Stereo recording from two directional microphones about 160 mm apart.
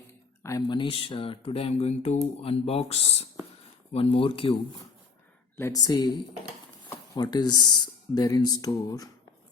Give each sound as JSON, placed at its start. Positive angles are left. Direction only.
{"t": 0.1, "sound": "a sound", "side_deg": 20}
{"t": 1.0, "sound": "speech", "side_deg": 35}
{"t": 5.5, "sound": "speech", "side_deg": 20}